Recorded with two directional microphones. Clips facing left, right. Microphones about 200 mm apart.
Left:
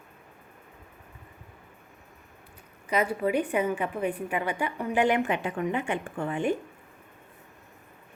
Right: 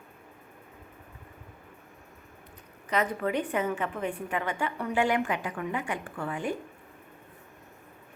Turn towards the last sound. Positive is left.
turn(degrees=25)  # may be behind; listen again after turning